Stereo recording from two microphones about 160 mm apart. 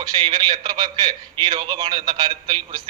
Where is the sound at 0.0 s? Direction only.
25° right (ahead or behind).